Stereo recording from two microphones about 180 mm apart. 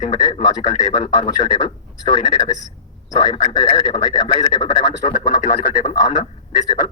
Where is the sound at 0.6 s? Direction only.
40° left (ahead or behind).